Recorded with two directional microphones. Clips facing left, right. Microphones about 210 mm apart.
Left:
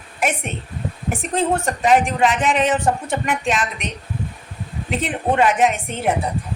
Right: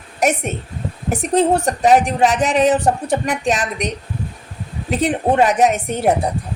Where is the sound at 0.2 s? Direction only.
40° right (ahead or behind).